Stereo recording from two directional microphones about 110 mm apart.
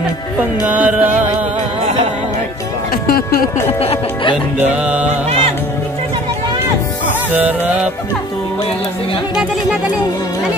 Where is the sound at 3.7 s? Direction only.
60° left (ahead or behind).